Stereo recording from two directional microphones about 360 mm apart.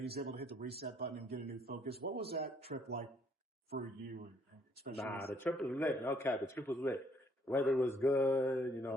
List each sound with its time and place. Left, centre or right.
0.0 s a man's voice: right
4.9 s a man's voice: right
5.3 s a man's voice: centre